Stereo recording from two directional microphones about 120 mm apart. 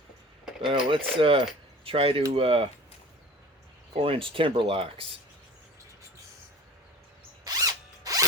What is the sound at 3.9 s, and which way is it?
Speech, 50° right (ahead or behind).